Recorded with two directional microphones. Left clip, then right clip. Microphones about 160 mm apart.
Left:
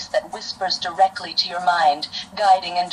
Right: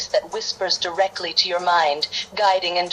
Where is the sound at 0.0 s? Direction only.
25° right (ahead or behind).